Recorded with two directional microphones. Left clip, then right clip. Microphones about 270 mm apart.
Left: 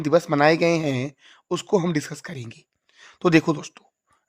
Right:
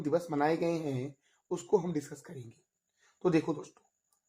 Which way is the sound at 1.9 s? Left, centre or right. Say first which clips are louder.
Left 10 dB; left.